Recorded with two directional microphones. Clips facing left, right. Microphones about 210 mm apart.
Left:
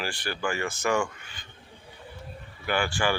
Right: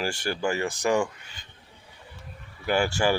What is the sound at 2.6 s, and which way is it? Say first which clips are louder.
Speech: right 3 dB; 40° right (ahead or behind).